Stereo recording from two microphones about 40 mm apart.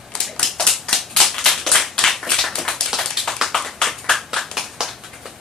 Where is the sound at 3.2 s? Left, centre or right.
Centre.